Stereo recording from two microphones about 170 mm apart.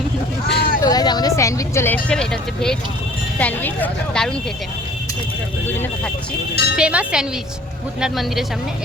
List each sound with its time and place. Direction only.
0.4 s vehicle: 55° left (ahead or behind)
0.8 s speech: 20° left (ahead or behind); by 4.4 s 5° left (ahead or behind)
5.6 s speech: 10° left (ahead or behind)
6.7 s speech: 5° right (ahead or behind)